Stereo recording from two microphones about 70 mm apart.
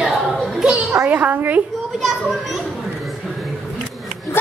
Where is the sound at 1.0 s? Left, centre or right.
Right.